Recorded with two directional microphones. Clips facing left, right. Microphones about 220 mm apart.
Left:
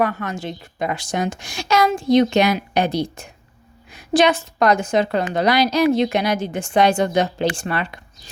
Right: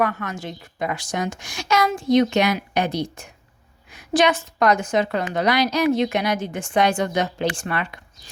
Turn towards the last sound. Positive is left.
turn(degrees=30)  # may be behind; listen again after turning